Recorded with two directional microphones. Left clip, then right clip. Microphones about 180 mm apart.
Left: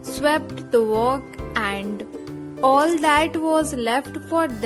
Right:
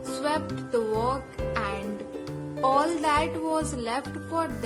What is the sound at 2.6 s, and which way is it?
Speech, 35° left (ahead or behind).